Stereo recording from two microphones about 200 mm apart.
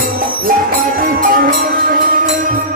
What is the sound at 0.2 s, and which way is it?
Music, 45° right (ahead or behind).